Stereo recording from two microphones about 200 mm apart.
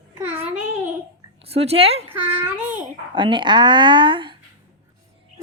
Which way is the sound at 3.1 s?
25° right (ahead or behind).